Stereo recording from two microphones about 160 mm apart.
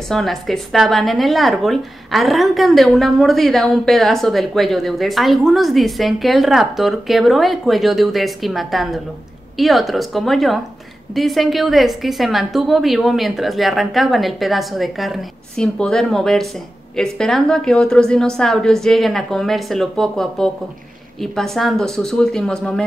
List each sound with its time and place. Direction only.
0.1 s a woman's voice: centre (ahead or behind)